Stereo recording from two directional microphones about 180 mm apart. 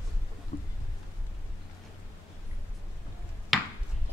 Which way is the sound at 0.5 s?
55° left (ahead or behind).